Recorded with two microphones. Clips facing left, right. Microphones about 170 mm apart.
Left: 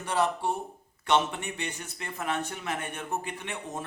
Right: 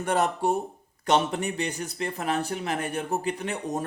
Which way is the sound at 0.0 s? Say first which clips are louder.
Right 3 dB; 50° right (ahead or behind).